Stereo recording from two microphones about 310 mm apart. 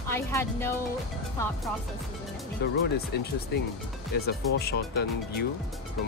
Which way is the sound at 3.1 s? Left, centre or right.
Left.